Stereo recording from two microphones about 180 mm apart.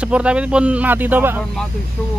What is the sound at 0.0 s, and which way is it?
Speech, 5° right (ahead or behind).